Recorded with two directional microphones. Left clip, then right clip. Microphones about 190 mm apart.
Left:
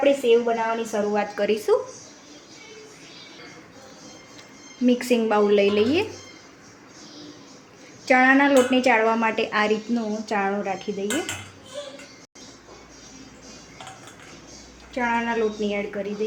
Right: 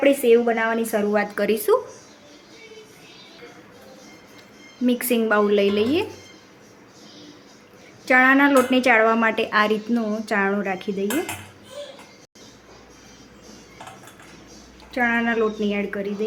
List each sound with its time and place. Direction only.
0.0 s a woman's voice: 30° right (ahead or behind)
4.9 s a woman's voice: 10° right (ahead or behind)
8.0 s a woman's voice: 10° right (ahead or behind)
14.9 s speech: 30° right (ahead or behind)